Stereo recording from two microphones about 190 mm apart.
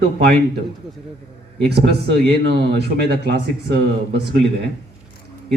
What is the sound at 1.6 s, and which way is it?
Speech, 60° right (ahead or behind).